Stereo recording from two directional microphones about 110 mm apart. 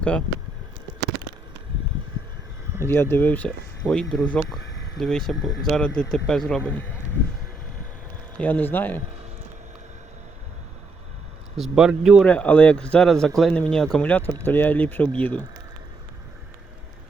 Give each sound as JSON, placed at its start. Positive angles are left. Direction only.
{"t": 0.0, "sound": "speech", "side_deg": 10}
{"t": 2.8, "sound": "speech", "side_deg": 20}
{"t": 8.4, "sound": "speech", "side_deg": 15}
{"t": 11.5, "sound": "speech", "side_deg": -5}
{"t": 12.2, "sound": "speech", "side_deg": 10}